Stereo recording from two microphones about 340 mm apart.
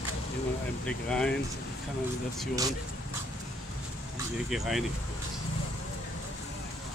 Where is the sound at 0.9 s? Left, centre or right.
Centre.